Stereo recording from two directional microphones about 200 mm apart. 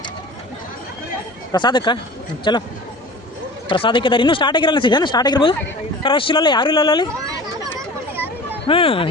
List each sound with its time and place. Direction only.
1.5 s speech: 25° left (ahead or behind)
3.7 s speech: 25° left (ahead or behind)
8.6 s speech: 25° left (ahead or behind)